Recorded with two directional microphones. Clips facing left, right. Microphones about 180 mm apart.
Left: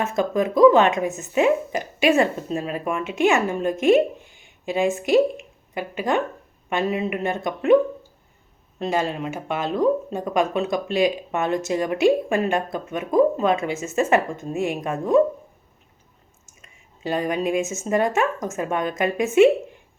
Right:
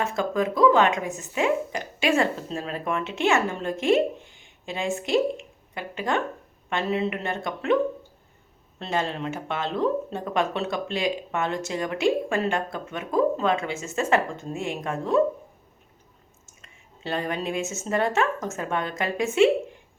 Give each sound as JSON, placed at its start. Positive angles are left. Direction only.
{"t": 0.0, "sound": "speech", "side_deg": 20}
{"t": 8.8, "sound": "speech", "side_deg": 15}
{"t": 17.0, "sound": "speech", "side_deg": 15}